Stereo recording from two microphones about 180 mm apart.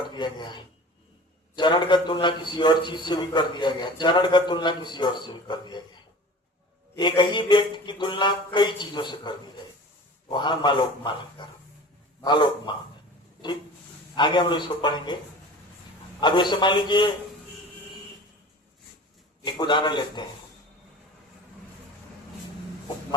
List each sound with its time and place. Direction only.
0.1 s a man's voice: 25° left (ahead or behind)
6.9 s a man's voice: 25° left (ahead or behind)
14.2 s a man's voice: 25° left (ahead or behind)
16.2 s a man's voice: 25° left (ahead or behind)
19.5 s a man's voice: 25° left (ahead or behind)